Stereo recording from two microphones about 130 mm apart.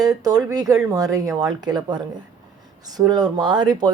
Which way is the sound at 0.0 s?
30° right (ahead or behind).